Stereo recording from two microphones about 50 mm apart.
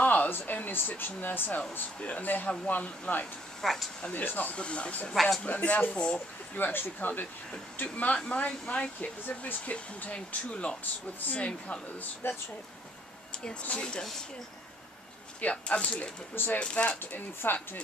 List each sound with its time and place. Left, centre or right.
0.0 s a sound: left
0.3 s speech: left
2.0 s speech: left
3.6 s a man's voice: centre
4.1 s speech: left
4.6 s speech: left
5.1 s a man's voice: centre
5.4 s speech: left
6.5 s speech: left
7.8 s speech: left
13.4 s speech: left
15.4 s speech: left
17.0 s speech: left